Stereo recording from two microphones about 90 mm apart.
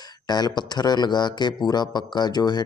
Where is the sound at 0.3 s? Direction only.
50° left (ahead or behind).